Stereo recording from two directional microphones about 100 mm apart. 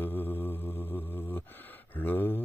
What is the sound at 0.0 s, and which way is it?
Mantra, 20° left (ahead or behind).